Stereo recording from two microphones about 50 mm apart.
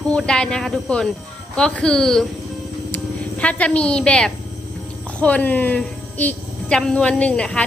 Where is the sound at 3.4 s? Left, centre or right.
Left.